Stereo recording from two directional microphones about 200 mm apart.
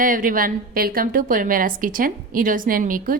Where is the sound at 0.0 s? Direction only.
45° right (ahead or behind).